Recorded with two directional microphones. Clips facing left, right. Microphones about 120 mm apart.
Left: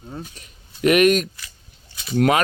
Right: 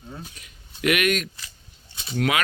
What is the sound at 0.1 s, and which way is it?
A man's voice, 35° left (ahead or behind).